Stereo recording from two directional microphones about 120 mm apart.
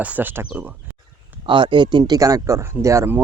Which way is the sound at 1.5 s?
40° right (ahead or behind).